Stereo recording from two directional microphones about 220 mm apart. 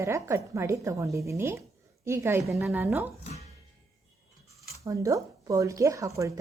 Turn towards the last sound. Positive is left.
turn(degrees=-15)  # may be behind; listen again after turning